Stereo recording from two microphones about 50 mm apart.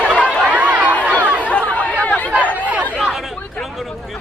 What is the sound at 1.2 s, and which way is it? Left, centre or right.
Chatter, right.